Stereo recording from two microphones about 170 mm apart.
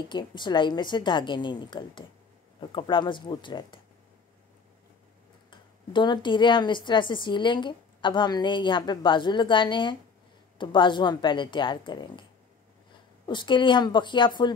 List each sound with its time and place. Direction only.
0.1 s speech: 25° left (ahead or behind)
5.5 s speech: 30° left (ahead or behind)
13.3 s speech: 25° left (ahead or behind)